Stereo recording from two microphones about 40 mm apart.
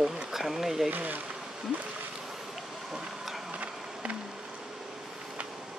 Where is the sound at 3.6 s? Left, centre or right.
Right.